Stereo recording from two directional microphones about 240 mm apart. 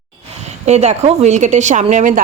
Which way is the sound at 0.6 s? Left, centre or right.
Right.